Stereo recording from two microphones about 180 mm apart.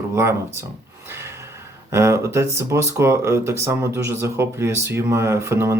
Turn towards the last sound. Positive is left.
turn(degrees=-15)  # may be behind; listen again after turning